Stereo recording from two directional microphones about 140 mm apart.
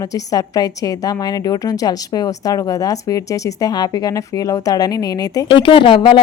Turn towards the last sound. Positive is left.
turn(degrees=35)  # may be behind; listen again after turning